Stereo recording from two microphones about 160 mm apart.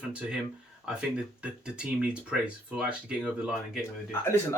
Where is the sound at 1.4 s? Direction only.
5° right (ahead or behind).